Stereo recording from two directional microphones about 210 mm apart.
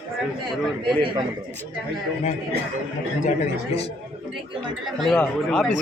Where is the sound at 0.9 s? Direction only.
25° right (ahead or behind).